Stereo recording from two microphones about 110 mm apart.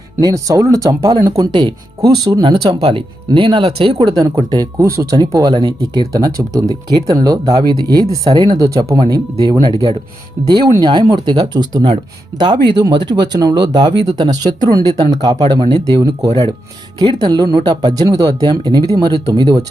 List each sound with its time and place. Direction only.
0.2 s speech: 35° right (ahead or behind)
1.4 s speech: 45° right (ahead or behind)
2.8 s speech: 50° right (ahead or behind)
3.9 s speech: 35° right (ahead or behind)